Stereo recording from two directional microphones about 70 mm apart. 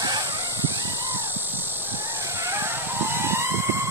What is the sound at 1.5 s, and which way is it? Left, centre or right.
Vehicle, right.